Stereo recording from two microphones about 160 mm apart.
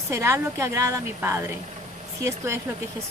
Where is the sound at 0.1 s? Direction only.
20° right (ahead or behind).